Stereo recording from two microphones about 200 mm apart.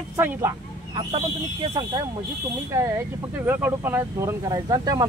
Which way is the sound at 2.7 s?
15° right (ahead or behind).